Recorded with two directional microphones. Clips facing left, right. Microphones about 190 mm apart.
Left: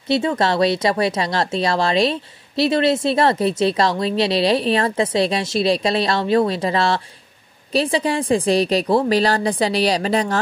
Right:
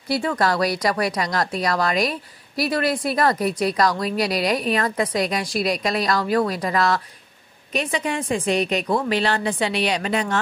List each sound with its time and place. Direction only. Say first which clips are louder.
0.1 s a woman's voice: left 3 dB; 25° left (ahead or behind)